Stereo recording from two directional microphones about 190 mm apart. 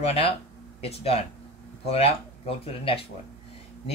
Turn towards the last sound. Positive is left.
turn(degrees=30)  # may be behind; listen again after turning